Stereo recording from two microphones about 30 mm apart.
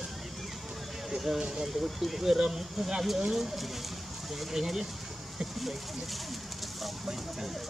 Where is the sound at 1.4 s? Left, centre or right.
Right.